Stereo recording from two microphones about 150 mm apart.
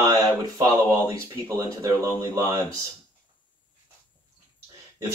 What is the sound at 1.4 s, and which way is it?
Speech, 25° right (ahead or behind).